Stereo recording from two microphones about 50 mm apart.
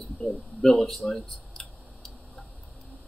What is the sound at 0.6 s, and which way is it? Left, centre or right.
Speech, centre.